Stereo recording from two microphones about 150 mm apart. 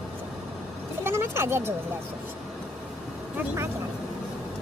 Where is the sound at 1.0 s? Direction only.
15° right (ahead or behind).